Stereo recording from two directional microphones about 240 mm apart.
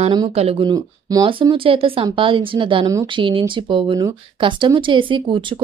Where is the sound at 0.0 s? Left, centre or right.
Right.